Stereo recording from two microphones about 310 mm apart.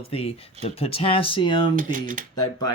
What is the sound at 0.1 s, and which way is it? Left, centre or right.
Speech, centre.